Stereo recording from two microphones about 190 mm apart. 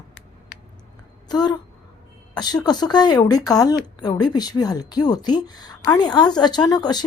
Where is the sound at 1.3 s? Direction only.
20° left (ahead or behind).